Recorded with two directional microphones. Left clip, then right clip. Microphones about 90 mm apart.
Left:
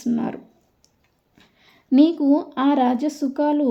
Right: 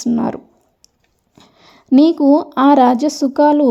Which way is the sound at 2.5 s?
90° right.